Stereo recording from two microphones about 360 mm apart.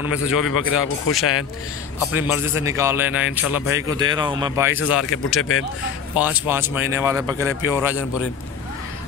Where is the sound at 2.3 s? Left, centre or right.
Centre.